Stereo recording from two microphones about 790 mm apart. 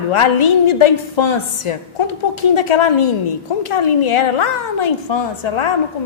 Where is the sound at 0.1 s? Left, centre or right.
Left.